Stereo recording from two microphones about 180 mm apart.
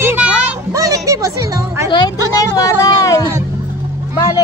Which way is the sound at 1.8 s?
25° left (ahead or behind).